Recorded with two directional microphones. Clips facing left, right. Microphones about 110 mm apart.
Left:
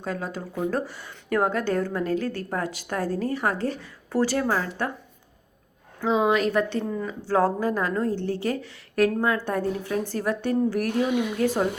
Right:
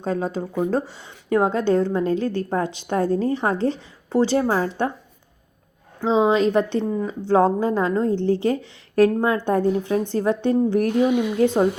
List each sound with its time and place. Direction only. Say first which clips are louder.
0.0 s speech: right 7 dB; 30° right (ahead or behind)
6.0 s speech: right 4 dB; 25° right (ahead or behind)